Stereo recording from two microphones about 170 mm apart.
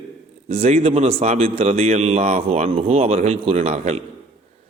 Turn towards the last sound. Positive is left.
turn(degrees=-40)  # may be behind; listen again after turning